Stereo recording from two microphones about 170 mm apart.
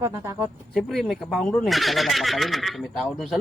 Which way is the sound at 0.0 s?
15° right (ahead or behind).